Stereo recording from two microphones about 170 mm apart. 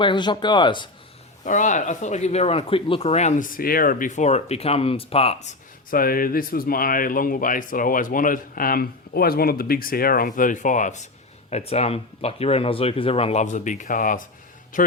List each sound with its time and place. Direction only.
0.0 s speech: 25° left (ahead or behind)
1.5 s speech: 45° left (ahead or behind)
5.9 s a man's voice: 60° left (ahead or behind)